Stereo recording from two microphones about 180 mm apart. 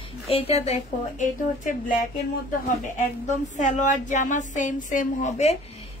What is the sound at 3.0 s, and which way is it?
Speech, 45° left (ahead or behind).